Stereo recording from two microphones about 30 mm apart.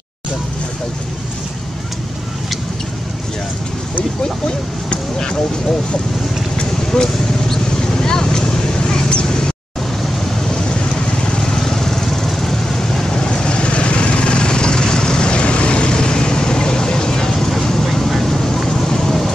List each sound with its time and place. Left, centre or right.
4.2 s a sound: left
7.0 s vehicle: left
10.5 s vehicle: left; by 19.3 s centre